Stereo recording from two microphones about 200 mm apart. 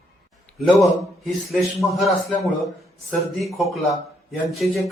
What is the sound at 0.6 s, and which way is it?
Speech, centre (ahead or behind).